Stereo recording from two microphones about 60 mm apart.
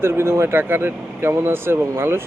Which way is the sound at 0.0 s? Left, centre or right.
Right.